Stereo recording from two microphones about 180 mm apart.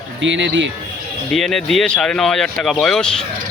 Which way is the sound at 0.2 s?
85° right.